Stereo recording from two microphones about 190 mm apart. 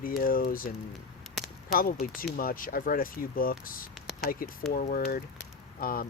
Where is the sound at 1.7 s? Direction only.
50° left (ahead or behind).